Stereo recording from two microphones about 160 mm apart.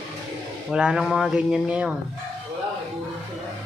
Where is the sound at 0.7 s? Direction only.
5° right (ahead or behind).